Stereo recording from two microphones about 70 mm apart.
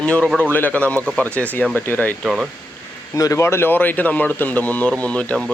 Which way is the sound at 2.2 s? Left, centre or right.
Centre.